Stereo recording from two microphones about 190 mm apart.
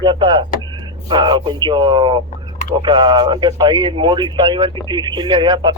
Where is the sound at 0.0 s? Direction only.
25° right (ahead or behind).